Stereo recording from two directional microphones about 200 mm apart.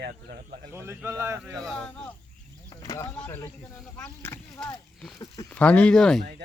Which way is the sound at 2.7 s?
20° left (ahead or behind).